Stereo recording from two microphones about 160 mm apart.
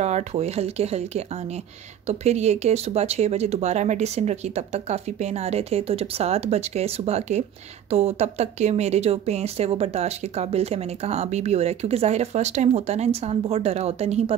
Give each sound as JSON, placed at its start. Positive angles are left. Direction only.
{"t": 0.0, "sound": "speech", "side_deg": -45}